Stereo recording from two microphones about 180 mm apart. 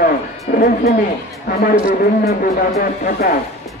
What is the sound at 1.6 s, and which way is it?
Speech, 55° left (ahead or behind).